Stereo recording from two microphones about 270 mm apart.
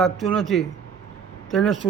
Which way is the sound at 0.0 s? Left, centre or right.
Centre.